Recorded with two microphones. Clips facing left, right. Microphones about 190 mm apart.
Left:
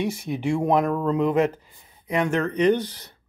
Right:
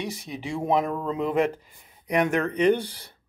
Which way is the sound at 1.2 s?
40° left (ahead or behind).